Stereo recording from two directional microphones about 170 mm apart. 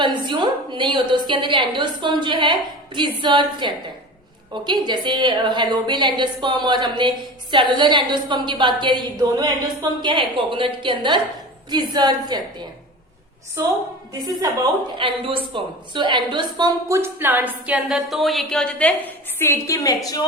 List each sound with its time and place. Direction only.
0.0 s a woman's voice: 25° right (ahead or behind)
14.1 s a woman's voice: 20° right (ahead or behind)
14.9 s a woman's voice: 30° right (ahead or behind); by 18.9 s 5° left (ahead or behind)
19.4 s a woman's voice: 15° left (ahead or behind)